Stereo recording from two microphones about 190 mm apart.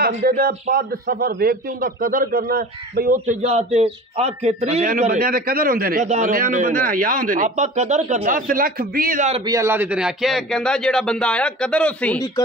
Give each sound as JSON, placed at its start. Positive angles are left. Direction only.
{"t": 0.0, "sound": "a man's voice", "side_deg": -55}
{"t": 9.5, "sound": "speech", "side_deg": -15}